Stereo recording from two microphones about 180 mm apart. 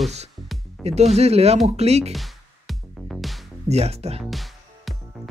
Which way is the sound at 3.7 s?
35° right (ahead or behind).